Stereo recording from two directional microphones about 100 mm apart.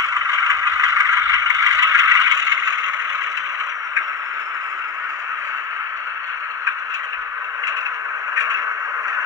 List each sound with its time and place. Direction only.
0.7 s scrape: 35° right (ahead or behind)